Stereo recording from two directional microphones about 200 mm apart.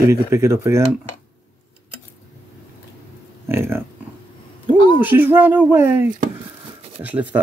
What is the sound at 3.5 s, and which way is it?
Speech, 10° right (ahead or behind).